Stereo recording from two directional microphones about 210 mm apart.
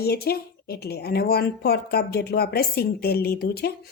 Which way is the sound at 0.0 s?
50° left (ahead or behind).